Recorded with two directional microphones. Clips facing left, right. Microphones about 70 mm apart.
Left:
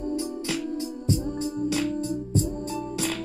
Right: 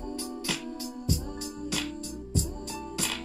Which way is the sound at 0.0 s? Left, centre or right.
Left.